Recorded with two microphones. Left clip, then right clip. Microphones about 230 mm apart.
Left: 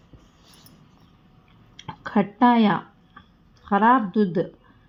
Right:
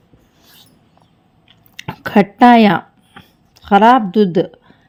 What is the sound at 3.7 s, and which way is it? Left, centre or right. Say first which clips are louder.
Speech: right 9 dB; right.